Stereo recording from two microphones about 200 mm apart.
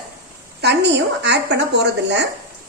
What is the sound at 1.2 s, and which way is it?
A woman's voice, 60° right (ahead or behind).